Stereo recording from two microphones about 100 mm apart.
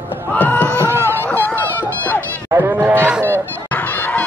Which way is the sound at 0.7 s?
25° right (ahead or behind).